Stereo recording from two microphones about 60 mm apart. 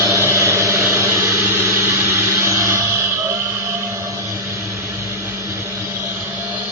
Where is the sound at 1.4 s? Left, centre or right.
Right.